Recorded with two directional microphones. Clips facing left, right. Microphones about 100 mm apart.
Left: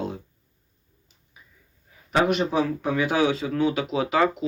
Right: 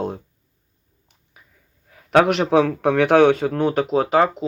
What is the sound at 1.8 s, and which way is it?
A man's voice, 75° right (ahead or behind).